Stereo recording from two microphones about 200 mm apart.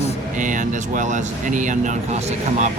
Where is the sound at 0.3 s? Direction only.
40° right (ahead or behind).